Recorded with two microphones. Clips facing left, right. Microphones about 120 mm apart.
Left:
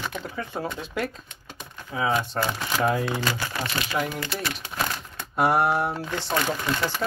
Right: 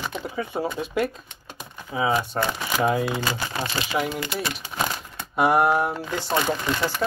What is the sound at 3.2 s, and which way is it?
Speech, 25° right (ahead or behind).